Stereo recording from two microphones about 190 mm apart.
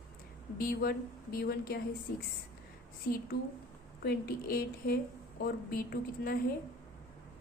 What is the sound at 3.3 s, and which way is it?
A woman's voice, 55° left (ahead or behind).